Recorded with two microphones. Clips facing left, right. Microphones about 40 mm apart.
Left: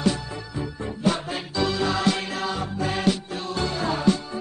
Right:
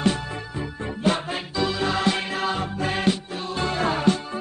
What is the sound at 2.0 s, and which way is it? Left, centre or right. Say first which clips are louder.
Music: right 1 dB; right.